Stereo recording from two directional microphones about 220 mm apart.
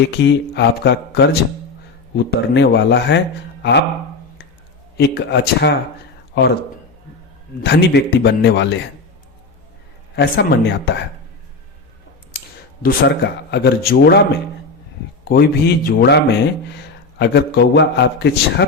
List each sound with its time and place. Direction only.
0.3 s a man's voice: 50° left (ahead or behind)
4.9 s a man's voice: 50° left (ahead or behind)
7.6 s a man's voice: 50° left (ahead or behind)
10.2 s a man's voice: 50° left (ahead or behind)
12.8 s a man's voice: 45° left (ahead or behind)
15.2 s a man's voice: 45° left (ahead or behind)